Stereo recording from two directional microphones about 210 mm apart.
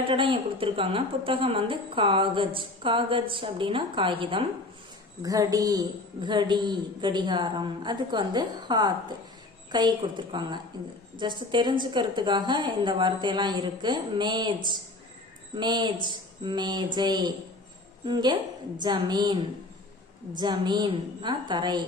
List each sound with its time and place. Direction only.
0.1 s a woman's voice: 25° right (ahead or behind)